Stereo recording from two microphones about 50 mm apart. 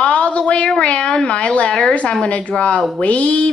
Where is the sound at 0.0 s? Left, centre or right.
Left.